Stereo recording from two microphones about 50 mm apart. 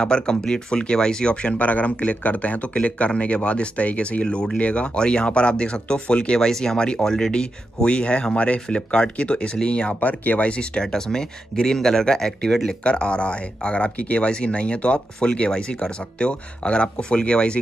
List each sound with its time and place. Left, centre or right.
0.0 s speech: centre; by 10.5 s left
10.6 s speech: centre